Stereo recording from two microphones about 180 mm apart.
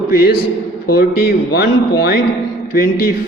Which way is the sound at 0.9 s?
60° left (ahead or behind).